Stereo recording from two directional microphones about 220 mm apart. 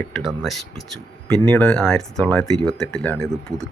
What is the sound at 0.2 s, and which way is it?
Speech, centre (ahead or behind).